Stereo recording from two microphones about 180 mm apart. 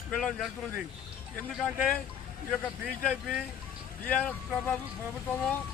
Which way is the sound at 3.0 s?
5° left (ahead or behind).